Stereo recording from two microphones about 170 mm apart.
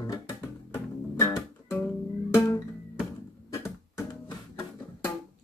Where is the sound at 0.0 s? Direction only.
20° left (ahead or behind).